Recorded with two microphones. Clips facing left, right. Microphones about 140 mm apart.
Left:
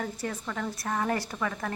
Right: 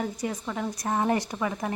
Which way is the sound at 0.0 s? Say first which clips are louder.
Right 3 dB; 15° right (ahead or behind).